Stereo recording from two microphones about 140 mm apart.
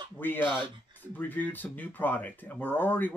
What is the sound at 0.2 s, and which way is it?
Speech, 15° left (ahead or behind).